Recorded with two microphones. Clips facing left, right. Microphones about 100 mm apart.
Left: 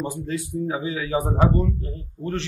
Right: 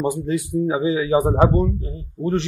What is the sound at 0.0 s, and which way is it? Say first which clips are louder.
A man's voice: right 6 dB; 15° right (ahead or behind).